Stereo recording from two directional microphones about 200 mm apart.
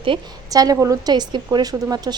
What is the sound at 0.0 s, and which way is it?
A woman's voice, 20° right (ahead or behind).